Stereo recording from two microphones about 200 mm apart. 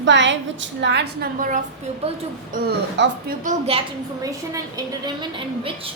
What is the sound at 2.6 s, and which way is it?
A woman's voice, 50° right (ahead or behind).